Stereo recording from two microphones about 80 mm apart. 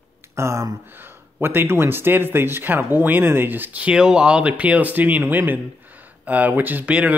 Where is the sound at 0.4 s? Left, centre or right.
Right.